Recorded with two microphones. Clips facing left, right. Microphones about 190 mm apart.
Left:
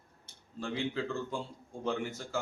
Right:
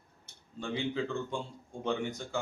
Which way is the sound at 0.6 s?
Centre (ahead or behind).